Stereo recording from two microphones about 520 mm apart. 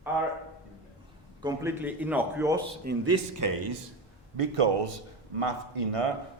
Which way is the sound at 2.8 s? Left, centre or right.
Right.